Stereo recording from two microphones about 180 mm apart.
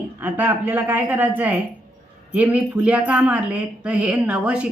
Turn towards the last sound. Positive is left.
turn(degrees=-5)  # may be behind; listen again after turning